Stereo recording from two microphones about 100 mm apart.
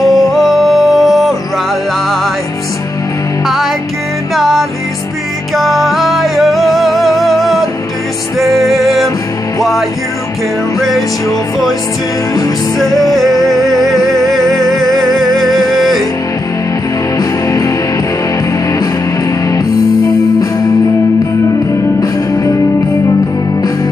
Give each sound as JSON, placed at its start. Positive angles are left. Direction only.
{"t": 0.0, "sound": "music", "side_deg": 0}
{"t": 4.4, "sound": "music", "side_deg": 0}
{"t": 12.7, "sound": "music", "side_deg": 0}
{"t": 17.2, "sound": "music", "side_deg": 35}